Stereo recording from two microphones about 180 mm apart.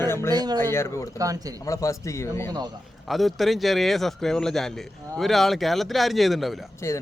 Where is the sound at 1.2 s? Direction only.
20° right (ahead or behind).